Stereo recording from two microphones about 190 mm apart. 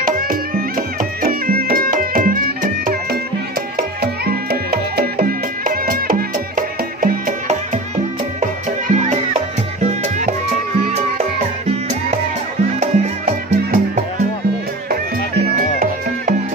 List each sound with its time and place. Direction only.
0.0 s music: 50° right (ahead or behind)